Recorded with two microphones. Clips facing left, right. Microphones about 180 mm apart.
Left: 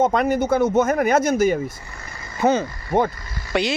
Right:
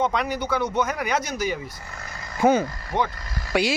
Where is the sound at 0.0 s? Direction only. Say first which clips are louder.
Left 6 dB; 50° left (ahead or behind).